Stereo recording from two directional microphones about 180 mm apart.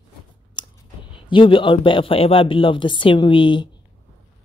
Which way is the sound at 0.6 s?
25° left (ahead or behind).